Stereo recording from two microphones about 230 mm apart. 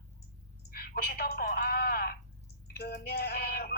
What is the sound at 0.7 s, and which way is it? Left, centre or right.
A woman's voice, left.